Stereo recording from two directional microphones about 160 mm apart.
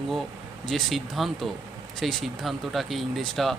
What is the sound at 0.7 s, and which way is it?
Speech, centre (ahead or behind).